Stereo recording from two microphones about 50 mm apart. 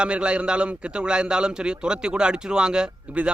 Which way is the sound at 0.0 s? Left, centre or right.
Right.